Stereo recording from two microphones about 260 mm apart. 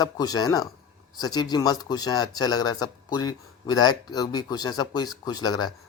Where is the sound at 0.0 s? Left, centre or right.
Centre.